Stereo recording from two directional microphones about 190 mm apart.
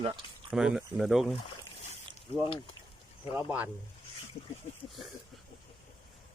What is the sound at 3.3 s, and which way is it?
Speech, 10° right (ahead or behind).